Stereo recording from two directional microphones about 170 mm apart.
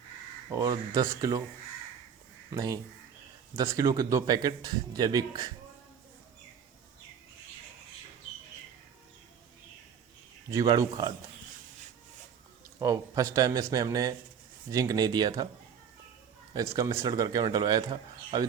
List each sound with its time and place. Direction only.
0.5 s speech: 20° right (ahead or behind)
2.5 s speech: 20° right (ahead or behind)
10.5 s speech: 20° right (ahead or behind)
12.8 s speech: 20° right (ahead or behind)
16.6 s speech: 20° right (ahead or behind)